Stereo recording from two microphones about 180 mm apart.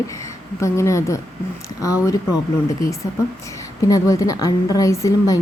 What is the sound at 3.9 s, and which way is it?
A woman's voice, 20° left (ahead or behind).